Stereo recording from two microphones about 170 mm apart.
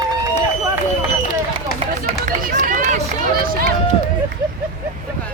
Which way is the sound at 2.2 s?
50° right (ahead or behind).